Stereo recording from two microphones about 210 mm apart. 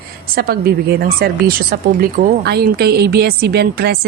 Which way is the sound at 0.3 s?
45° right (ahead or behind).